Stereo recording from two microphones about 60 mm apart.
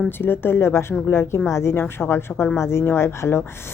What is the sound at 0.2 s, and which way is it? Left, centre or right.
A woman's voice, left.